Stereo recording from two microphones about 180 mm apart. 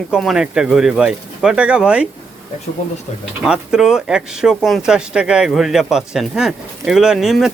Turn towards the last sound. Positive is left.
turn(degrees=0)  # may be behind; listen again after turning